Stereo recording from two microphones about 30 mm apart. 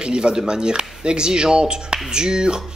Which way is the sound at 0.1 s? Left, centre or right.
Right.